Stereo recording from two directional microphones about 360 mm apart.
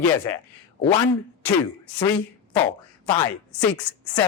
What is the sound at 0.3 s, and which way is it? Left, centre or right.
Speech, centre.